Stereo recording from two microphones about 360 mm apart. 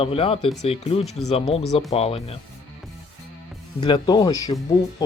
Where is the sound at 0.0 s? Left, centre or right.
Centre.